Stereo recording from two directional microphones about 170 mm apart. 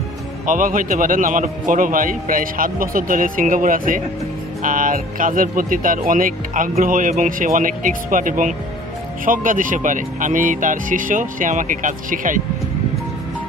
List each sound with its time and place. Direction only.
0.5 s a man's voice: 50° right (ahead or behind)